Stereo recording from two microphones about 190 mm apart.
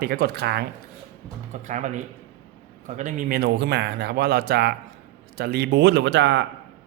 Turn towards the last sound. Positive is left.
turn(degrees=-65)  # may be behind; listen again after turning